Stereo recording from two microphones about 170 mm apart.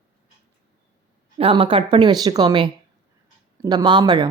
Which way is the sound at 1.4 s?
30° right (ahead or behind).